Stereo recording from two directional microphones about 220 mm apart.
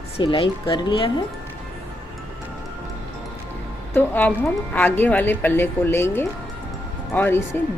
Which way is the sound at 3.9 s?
10° left (ahead or behind).